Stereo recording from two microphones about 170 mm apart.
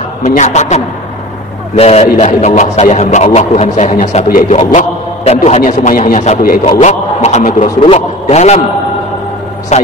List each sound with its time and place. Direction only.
0.3 s a man's voice: 45° left (ahead or behind)
1.8 s didgeridoo: 35° left (ahead or behind)
3.9 s a man's voice: 50° left (ahead or behind)
4.7 s a man's voice: 40° left (ahead or behind)
5.6 s a man's voice: 50° left (ahead or behind)
6.6 s didgeridoo: 40° left (ahead or behind)
9.7 s didgeridoo: 40° left (ahead or behind)